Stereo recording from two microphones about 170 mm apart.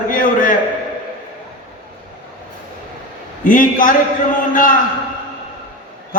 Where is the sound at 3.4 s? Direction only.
55° left (ahead or behind).